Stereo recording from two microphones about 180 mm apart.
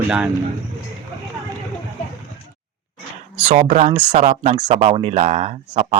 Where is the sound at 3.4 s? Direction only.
40° right (ahead or behind).